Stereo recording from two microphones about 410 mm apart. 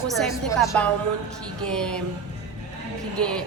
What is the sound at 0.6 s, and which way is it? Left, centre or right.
A woman's voice, centre.